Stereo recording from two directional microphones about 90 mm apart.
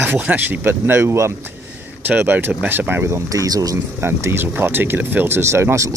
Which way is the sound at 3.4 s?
45° right (ahead or behind).